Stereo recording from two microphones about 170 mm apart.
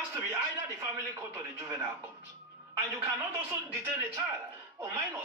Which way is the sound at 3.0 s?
15° right (ahead or behind).